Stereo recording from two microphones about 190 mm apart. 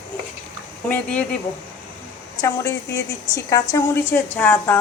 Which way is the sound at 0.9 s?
5° left (ahead or behind).